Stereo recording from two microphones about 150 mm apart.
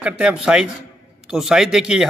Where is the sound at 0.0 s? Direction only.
5° right (ahead or behind).